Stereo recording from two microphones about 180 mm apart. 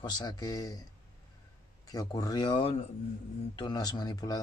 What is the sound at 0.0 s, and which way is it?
Speech, 25° left (ahead or behind).